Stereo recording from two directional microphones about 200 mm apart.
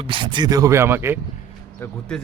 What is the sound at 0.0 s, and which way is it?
Speech, 25° right (ahead or behind).